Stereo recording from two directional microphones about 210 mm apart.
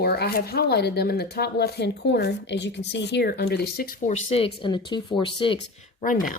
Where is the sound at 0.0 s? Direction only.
50° left (ahead or behind).